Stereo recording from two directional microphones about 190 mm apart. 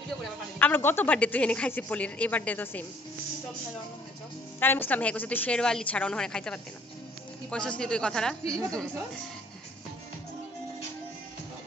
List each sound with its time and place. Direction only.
0.6 s a woman's voice: 10° left (ahead or behind)
4.6 s a woman's voice: 10° left (ahead or behind)